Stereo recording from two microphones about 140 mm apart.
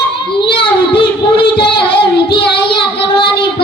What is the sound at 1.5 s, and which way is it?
Child singing, 35° left (ahead or behind).